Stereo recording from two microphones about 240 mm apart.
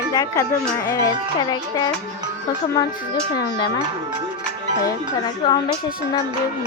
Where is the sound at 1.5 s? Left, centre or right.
Centre.